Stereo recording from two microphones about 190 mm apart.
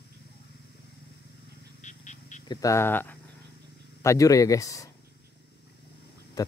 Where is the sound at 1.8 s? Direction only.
40° left (ahead or behind).